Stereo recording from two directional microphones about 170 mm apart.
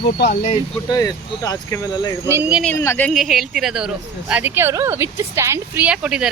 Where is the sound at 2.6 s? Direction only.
15° left (ahead or behind).